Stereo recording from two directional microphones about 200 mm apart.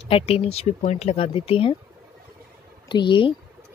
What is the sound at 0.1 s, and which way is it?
Speech, 30° left (ahead or behind).